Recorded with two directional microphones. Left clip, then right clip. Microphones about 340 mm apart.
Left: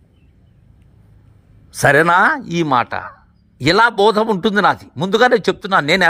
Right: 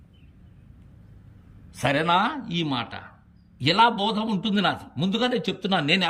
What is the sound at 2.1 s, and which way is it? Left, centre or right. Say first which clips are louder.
Speech: left 10 dB; left.